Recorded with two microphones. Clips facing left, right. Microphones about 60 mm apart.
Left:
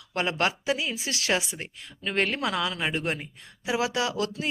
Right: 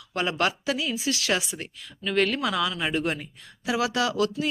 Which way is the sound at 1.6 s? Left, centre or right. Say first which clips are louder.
Right 2 dB; left.